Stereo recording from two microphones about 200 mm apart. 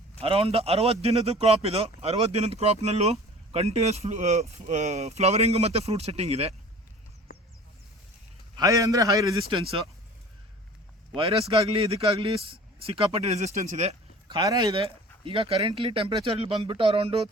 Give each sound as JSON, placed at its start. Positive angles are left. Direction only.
{"t": 0.2, "sound": "a man's voice", "side_deg": -30}
{"t": 8.5, "sound": "a man's voice", "side_deg": -15}
{"t": 11.1, "sound": "a man's voice", "side_deg": -25}
{"t": 14.3, "sound": "speech", "side_deg": -20}